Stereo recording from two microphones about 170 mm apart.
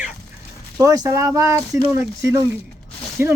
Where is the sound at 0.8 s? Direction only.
20° right (ahead or behind).